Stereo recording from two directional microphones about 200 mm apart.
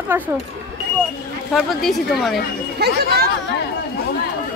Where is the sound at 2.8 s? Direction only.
50° right (ahead or behind).